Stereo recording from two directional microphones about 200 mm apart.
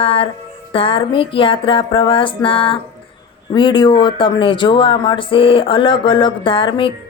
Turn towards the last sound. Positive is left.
turn(degrees=25)  # may be behind; listen again after turning